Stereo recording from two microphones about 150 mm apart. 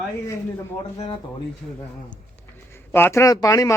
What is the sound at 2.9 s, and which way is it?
Speech, 15° left (ahead or behind).